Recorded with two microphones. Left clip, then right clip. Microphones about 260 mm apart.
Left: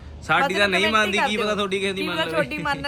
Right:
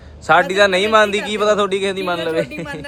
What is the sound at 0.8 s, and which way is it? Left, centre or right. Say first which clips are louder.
Speech: right 5 dB; right.